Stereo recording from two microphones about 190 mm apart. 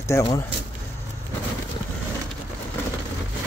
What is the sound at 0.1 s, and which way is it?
Speech, 15° left (ahead or behind).